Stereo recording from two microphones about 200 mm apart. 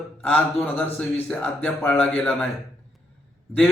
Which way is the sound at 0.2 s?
10° left (ahead or behind).